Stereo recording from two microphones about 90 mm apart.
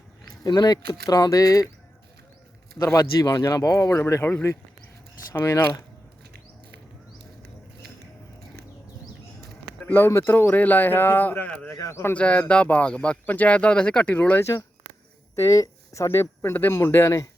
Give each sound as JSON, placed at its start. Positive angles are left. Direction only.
{"t": 0.4, "sound": "speech", "side_deg": 45}
{"t": 2.7, "sound": "speech", "side_deg": 25}
{"t": 3.0, "sound": "speech", "side_deg": 40}
{"t": 9.8, "sound": "speech", "side_deg": 20}
{"t": 11.7, "sound": "speech", "side_deg": 35}
{"t": 12.1, "sound": "speech", "side_deg": 15}
{"t": 15.4, "sound": "speech", "side_deg": 40}